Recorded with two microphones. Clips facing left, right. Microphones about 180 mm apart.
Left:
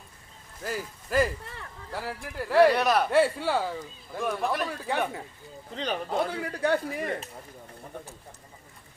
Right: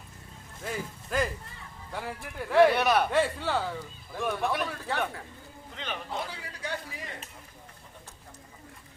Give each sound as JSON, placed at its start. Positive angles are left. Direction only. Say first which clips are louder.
{"t": 0.6, "sound": "speech", "louder": "left 2 dB", "side_deg": 5}
{"t": 4.9, "sound": "speech", "louder": "left 4 dB", "side_deg": 15}
{"t": 5.7, "sound": "speech", "louder": "left 7 dB", "side_deg": 40}
{"t": 6.1, "sound": "a man's voice", "louder": "left 8 dB", "side_deg": 55}